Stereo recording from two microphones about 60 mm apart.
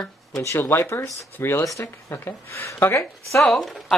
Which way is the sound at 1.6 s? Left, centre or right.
Left.